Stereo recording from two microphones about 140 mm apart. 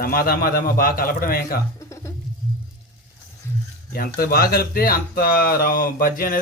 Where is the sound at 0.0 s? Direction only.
90° left.